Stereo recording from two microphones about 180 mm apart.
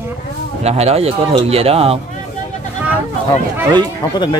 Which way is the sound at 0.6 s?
35° right (ahead or behind).